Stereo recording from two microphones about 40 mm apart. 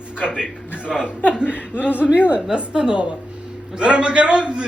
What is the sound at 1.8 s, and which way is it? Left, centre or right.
Speech, left.